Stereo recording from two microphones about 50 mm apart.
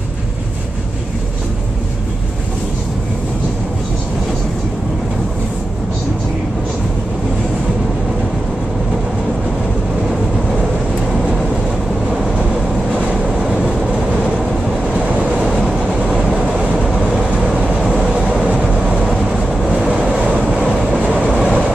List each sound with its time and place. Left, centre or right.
15.0 s vehicle: right
15.2 s vehicle: centre
17.9 s train: centre
18.9 s vehicle: centre
20.0 s train: right
21.0 s train: right
21.3 s vehicle: centre